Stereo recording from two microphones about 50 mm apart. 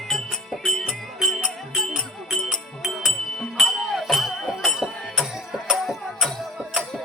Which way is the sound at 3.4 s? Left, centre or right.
Centre.